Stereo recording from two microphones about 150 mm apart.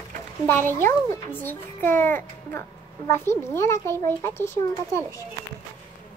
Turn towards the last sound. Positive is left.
turn(degrees=20)  # may be behind; listen again after turning